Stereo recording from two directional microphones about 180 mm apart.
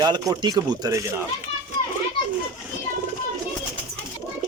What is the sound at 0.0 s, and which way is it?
Speech, 25° right (ahead or behind).